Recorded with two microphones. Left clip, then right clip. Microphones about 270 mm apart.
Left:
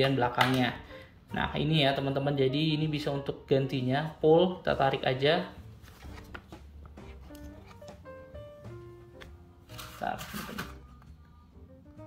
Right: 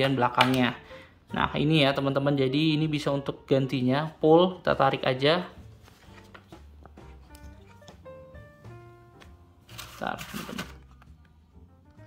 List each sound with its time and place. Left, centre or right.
0.0 s speech: centre
9.9 s pig: right